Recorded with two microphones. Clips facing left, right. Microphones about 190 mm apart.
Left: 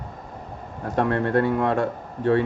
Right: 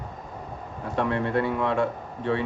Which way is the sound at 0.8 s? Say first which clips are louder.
Left 3 dB; 45° left (ahead or behind).